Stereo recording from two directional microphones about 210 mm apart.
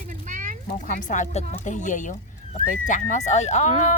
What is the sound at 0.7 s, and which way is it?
Speech, 40° left (ahead or behind).